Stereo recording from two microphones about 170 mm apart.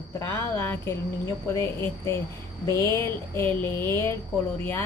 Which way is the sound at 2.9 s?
15° left (ahead or behind).